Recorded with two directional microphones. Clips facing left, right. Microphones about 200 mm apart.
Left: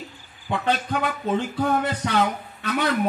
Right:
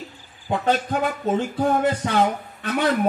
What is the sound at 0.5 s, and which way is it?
A man's voice, 45° right (ahead or behind).